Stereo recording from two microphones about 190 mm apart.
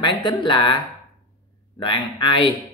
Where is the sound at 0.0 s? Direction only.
25° left (ahead or behind).